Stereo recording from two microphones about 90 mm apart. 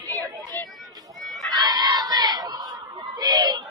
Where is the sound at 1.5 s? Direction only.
50° right (ahead or behind).